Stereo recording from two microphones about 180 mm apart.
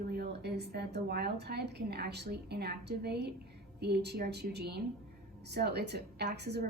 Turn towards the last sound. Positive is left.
turn(degrees=-65)  # may be behind; listen again after turning